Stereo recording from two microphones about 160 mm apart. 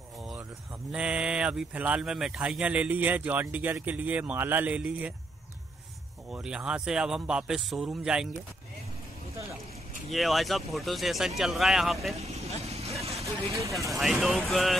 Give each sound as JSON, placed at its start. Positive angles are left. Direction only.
{"t": 0.9, "sound": "speech", "side_deg": -5}
{"t": 6.3, "sound": "speech", "side_deg": -5}
{"t": 10.1, "sound": "speech", "side_deg": 0}
{"t": 12.2, "sound": "vehicle", "side_deg": -40}
{"t": 13.2, "sound": "speech", "side_deg": -20}
{"t": 14.2, "sound": "speech", "side_deg": 0}